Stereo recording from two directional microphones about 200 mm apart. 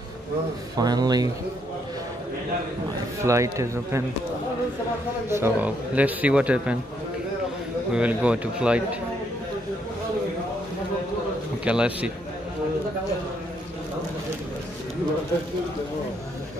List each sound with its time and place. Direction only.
0.7 s speech: 20° right (ahead or behind)
3.3 s a man's voice: 15° right (ahead or behind)
5.3 s a man's voice: 10° right (ahead or behind)
7.9 s speech: 5° right (ahead or behind)
11.6 s speech: 5° right (ahead or behind)